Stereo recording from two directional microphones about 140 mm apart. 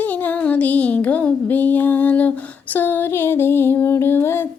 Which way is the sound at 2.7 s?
15° left (ahead or behind).